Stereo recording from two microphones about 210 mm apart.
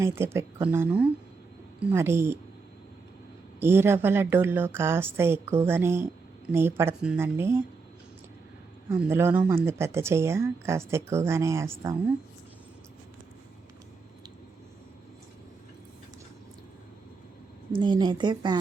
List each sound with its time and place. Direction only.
0.0 s speech: 10° right (ahead or behind)
3.6 s speech: 10° right (ahead or behind)
8.9 s speech: 10° right (ahead or behind)
17.7 s speech: 20° right (ahead or behind)